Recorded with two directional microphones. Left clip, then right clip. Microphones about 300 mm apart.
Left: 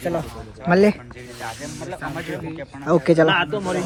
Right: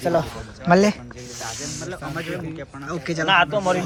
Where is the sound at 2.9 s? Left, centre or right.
Centre.